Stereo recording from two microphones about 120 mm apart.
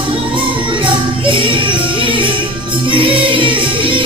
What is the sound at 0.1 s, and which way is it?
Music, 45° right (ahead or behind).